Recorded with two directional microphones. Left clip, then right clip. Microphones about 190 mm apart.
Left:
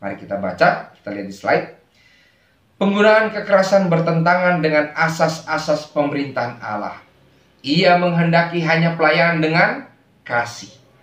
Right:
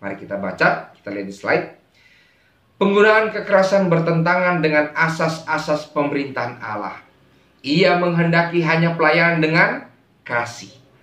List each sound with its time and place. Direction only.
0.0 s a man's voice: 15° right (ahead or behind)
2.8 s a man's voice: 15° right (ahead or behind)